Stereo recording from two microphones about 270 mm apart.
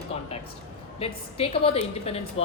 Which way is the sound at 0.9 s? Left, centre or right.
Left.